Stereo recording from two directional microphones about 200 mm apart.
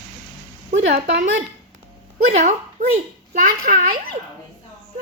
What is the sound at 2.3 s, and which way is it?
A woman's voice, 35° right (ahead or behind).